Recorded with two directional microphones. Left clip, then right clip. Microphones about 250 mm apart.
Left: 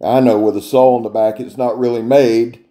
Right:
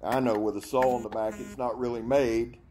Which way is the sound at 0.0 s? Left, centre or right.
Centre.